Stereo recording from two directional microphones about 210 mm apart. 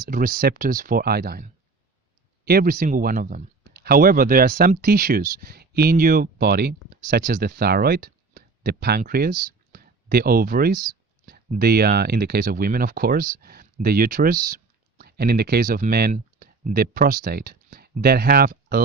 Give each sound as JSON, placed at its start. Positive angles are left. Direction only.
{"t": 0.0, "sound": "speech", "side_deg": -40}